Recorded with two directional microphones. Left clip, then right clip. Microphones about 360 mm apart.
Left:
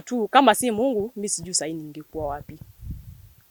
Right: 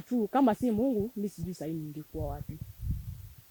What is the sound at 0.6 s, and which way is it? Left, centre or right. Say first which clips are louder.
Speech: left 7 dB; left.